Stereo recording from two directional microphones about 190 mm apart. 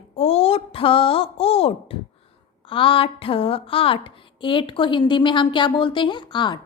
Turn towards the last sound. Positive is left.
turn(degrees=25)  # may be behind; listen again after turning